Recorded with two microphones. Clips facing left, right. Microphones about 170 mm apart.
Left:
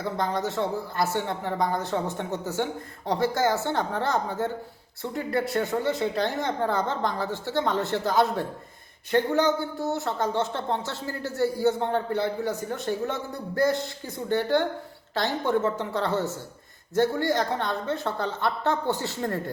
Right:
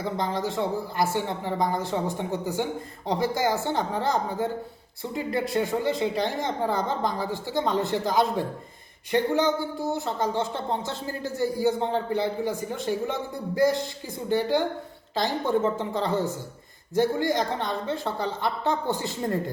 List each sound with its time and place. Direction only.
0.0 s speech: 15° right (ahead or behind)